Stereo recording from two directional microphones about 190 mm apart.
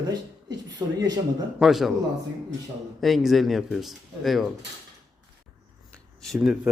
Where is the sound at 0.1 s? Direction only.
20° right (ahead or behind).